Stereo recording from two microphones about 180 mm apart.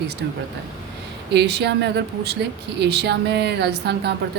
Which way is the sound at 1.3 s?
65° right (ahead or behind).